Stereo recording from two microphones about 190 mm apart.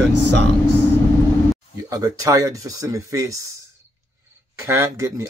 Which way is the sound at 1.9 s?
20° right (ahead or behind).